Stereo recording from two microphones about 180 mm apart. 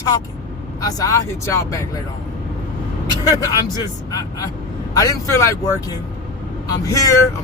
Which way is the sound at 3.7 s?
20° left (ahead or behind).